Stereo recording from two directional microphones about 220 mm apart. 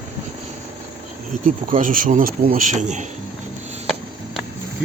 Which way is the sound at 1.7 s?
40° right (ahead or behind).